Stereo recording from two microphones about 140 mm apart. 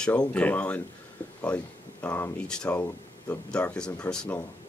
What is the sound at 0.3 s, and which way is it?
Speech, 10° left (ahead or behind).